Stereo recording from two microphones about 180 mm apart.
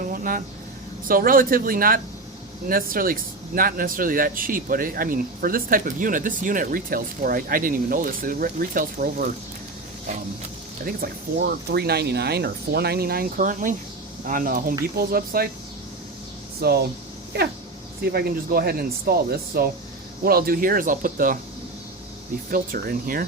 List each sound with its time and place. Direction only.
0.0 s a sound: 50° right (ahead or behind)
1.0 s speech: 50° right (ahead or behind)
10.8 s speech: 60° right (ahead or behind)
16.6 s speech: 60° right (ahead or behind)
18.0 s speech: 60° right (ahead or behind)
22.5 s speech: 50° right (ahead or behind)